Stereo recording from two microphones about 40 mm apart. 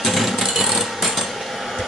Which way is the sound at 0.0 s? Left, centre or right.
Centre.